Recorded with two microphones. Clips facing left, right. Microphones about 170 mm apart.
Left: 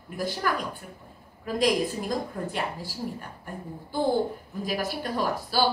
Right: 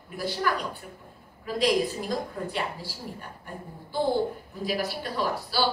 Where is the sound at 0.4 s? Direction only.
45° left (ahead or behind).